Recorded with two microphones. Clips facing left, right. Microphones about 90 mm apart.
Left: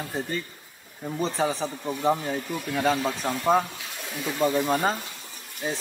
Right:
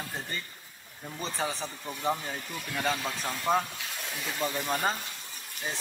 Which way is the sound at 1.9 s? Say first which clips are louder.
Left 6 dB; 20° left (ahead or behind).